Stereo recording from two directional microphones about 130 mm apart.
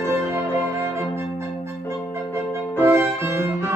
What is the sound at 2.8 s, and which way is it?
Music, 20° right (ahead or behind).